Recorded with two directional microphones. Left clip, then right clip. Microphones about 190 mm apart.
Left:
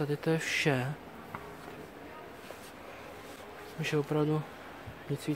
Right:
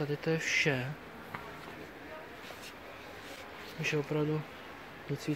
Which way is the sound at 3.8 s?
20° left (ahead or behind).